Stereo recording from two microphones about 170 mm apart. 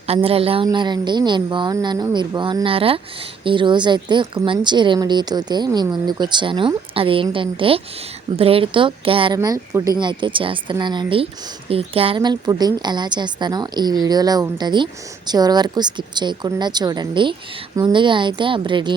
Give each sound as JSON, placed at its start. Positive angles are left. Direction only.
{"t": 0.1, "sound": "a woman's voice", "side_deg": -35}